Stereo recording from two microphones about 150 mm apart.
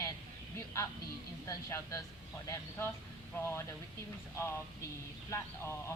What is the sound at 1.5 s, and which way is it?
Speech, 20° left (ahead or behind).